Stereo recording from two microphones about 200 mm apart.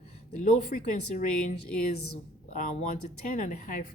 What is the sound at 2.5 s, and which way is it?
A woman's voice, 40° left (ahead or behind).